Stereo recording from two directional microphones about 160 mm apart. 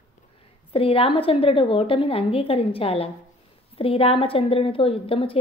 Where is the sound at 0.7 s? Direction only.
35° left (ahead or behind).